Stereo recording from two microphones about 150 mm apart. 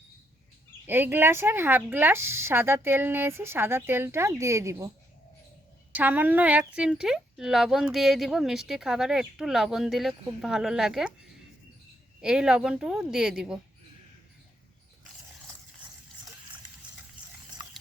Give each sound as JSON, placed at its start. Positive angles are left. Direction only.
{"t": 0.9, "sound": "speech", "side_deg": -15}
{"t": 5.9, "sound": "speech", "side_deg": -10}
{"t": 12.2, "sound": "speech", "side_deg": -5}